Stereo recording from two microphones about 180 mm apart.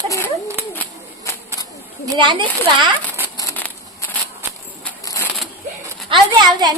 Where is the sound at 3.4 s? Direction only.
15° left (ahead or behind).